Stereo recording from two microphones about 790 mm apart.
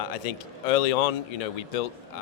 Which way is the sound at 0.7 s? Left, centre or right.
Left.